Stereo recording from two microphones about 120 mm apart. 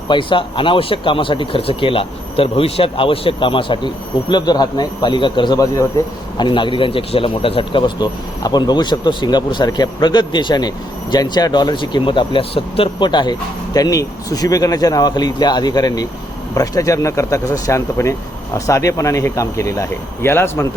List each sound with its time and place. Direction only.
0.1 s speech: 45° left (ahead or behind); by 20.7 s 20° left (ahead or behind)